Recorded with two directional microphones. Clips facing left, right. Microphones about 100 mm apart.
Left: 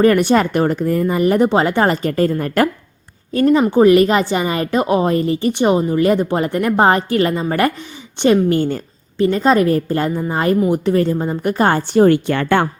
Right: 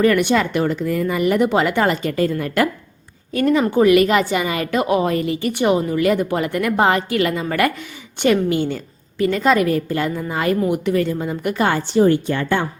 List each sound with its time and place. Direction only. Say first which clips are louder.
0.0 s a woman's voice: left 3 dB; 35° left (ahead or behind)
8.4 s a woman's voice: left 3 dB; 45° left (ahead or behind)
9.1 s a woman's voice: left 3 dB; 30° left (ahead or behind); by 12.0 s 50° left (ahead or behind)
12.0 s speech: left 3 dB; 70° left (ahead or behind)